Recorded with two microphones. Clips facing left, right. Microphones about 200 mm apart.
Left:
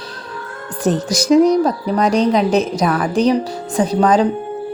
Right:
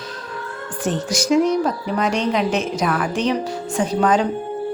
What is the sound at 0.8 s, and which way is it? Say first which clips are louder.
A woman's voice: left 5 dB; 35° left (ahead or behind).